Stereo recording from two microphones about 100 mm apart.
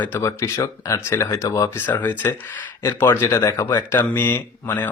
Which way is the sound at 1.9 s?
20° left (ahead or behind).